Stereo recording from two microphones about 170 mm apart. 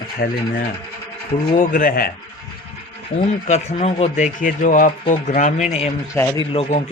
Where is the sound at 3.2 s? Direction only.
40° left (ahead or behind).